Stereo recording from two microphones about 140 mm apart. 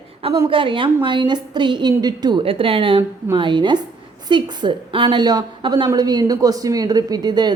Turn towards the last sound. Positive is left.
turn(degrees=-30)  # may be behind; listen again after turning